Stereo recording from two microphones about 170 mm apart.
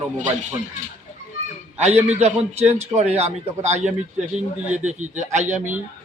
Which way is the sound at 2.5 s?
40° right (ahead or behind).